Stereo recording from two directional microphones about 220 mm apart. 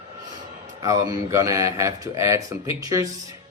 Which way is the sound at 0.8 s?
15° right (ahead or behind).